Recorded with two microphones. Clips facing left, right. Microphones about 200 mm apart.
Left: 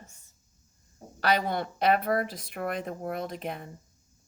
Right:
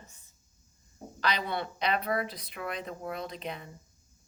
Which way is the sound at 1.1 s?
50° left (ahead or behind).